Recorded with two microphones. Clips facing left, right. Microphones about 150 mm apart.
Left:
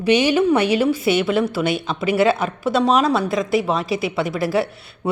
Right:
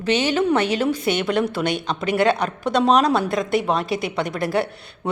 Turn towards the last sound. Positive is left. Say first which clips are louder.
# left 2 dB
turn(degrees=5)  # may be behind; listen again after turning